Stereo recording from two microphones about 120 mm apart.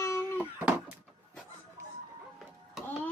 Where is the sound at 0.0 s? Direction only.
20° left (ahead or behind).